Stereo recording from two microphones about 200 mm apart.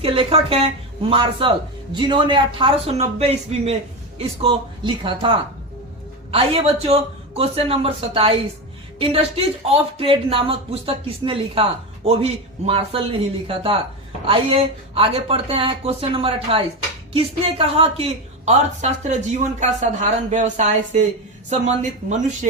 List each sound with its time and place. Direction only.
0.0 s a man's voice: 30° right (ahead or behind)
6.3 s a man's voice: 30° right (ahead or behind)